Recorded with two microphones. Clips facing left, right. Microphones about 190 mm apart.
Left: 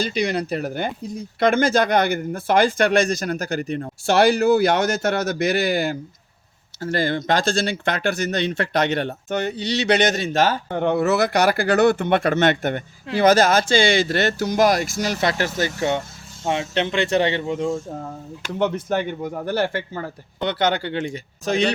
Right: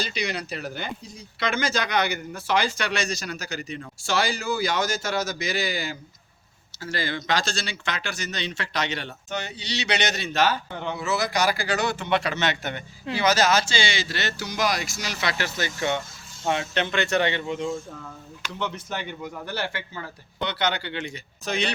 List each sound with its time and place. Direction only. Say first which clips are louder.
0.0 s speech: left 7 dB; 50° left (ahead or behind)
16.5 s speech: left 3 dB; 25° left (ahead or behind); by 21.7 s 45° left (ahead or behind)